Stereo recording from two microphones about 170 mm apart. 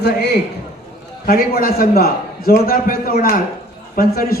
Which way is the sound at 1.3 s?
60° left (ahead or behind).